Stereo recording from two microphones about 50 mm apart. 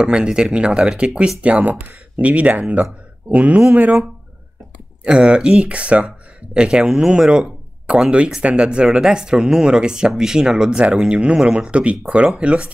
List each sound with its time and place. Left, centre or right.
0.0 s speech: centre
1.8 s speech: right
2.2 s speech: right
5.0 s speech: centre